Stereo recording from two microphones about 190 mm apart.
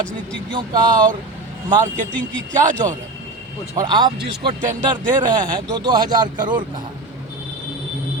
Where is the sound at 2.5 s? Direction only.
40° right (ahead or behind).